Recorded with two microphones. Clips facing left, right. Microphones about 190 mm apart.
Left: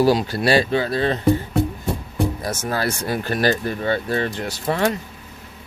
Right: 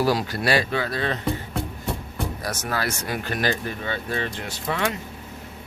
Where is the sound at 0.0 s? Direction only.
25° left (ahead or behind).